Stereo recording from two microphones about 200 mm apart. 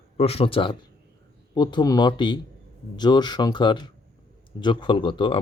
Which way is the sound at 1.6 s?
20° left (ahead or behind).